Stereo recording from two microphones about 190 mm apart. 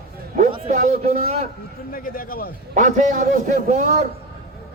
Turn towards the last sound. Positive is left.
turn(degrees=-40)  # may be behind; listen again after turning